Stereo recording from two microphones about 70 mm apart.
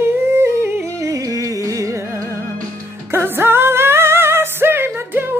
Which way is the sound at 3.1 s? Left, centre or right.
Right.